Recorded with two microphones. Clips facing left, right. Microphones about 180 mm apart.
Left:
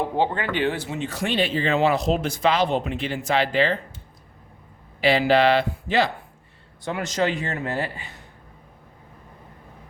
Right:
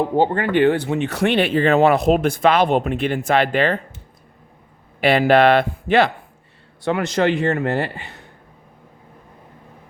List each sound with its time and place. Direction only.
0.2 s speech: 55° right (ahead or behind)
4.9 s speech: 55° right (ahead or behind)